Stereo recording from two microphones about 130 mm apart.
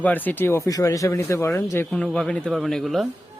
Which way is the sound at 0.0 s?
15° left (ahead or behind).